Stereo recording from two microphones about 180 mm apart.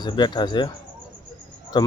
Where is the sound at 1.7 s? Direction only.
25° left (ahead or behind).